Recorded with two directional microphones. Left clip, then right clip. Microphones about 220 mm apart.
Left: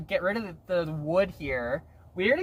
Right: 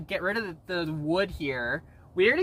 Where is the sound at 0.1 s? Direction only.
35° right (ahead or behind).